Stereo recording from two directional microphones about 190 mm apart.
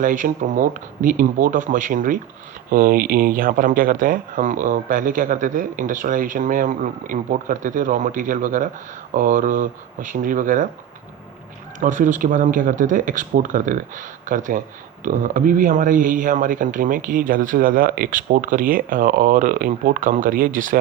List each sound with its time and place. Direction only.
0.0 s speech: 45° right (ahead or behind)
11.8 s speech: 40° right (ahead or behind)